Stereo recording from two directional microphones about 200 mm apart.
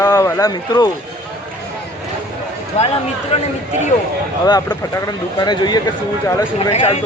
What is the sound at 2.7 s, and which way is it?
Speech, 30° left (ahead or behind).